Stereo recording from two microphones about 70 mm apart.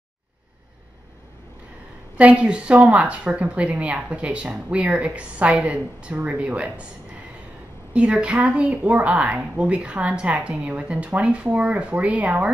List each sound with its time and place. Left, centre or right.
2.1 s a woman's voice: centre
7.9 s a woman's voice: centre